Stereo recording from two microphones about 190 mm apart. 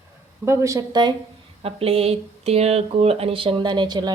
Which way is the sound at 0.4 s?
15° right (ahead or behind).